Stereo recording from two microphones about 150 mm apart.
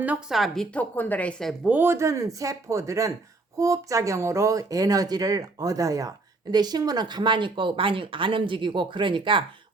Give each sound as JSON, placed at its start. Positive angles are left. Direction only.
{"t": 0.0, "sound": "a woman's voice", "side_deg": -5}
{"t": 1.7, "sound": "speech", "side_deg": -15}